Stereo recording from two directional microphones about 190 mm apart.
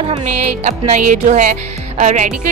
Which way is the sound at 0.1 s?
35° right (ahead or behind).